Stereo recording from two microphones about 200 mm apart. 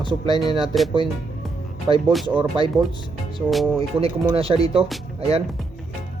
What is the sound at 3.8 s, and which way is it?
Speech, 30° right (ahead or behind).